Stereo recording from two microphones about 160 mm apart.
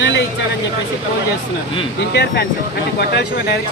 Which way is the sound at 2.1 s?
90° left.